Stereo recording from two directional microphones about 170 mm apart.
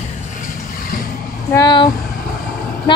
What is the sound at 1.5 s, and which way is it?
Speech, 25° left (ahead or behind).